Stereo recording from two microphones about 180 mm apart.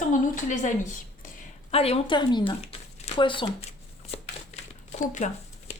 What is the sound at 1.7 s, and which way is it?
Speech, 35° left (ahead or behind).